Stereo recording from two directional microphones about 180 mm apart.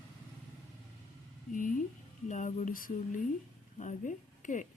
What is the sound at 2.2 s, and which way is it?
A woman's voice, 45° left (ahead or behind).